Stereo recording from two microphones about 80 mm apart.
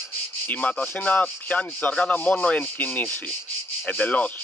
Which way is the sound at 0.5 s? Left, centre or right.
Centre.